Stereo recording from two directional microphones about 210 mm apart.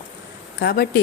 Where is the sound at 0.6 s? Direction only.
45° left (ahead or behind).